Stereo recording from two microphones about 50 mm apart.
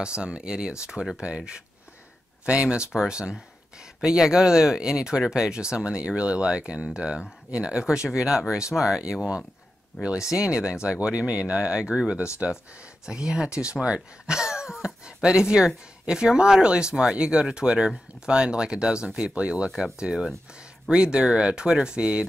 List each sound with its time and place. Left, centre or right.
0.0 s speech: centre
9.9 s speech: centre
10.3 s speech: centre